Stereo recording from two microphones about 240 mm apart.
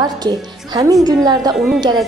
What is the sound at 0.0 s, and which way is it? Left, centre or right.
Speech, centre.